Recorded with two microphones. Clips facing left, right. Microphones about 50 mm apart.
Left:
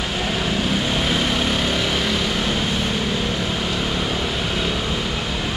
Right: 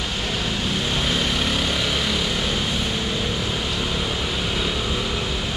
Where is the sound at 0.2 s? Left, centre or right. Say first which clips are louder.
Left 4 dB; centre.